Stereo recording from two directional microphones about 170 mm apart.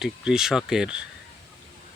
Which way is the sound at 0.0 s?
5° right (ahead or behind).